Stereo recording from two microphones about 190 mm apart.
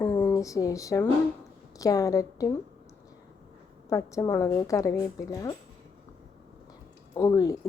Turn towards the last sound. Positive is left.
turn(degrees=20)  # may be behind; listen again after turning